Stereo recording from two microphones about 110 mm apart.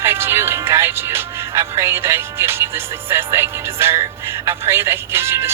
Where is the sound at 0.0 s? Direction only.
20° right (ahead or behind).